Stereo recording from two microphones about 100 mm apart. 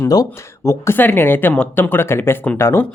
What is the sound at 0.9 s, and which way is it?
Speech, 20° left (ahead or behind).